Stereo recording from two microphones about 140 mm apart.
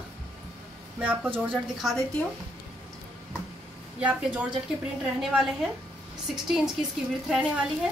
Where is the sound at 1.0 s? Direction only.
10° right (ahead or behind).